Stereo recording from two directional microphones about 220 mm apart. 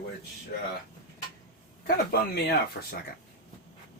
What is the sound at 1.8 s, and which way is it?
Speech, 45° left (ahead or behind).